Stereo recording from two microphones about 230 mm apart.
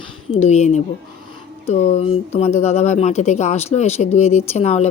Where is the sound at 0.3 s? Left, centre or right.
Left.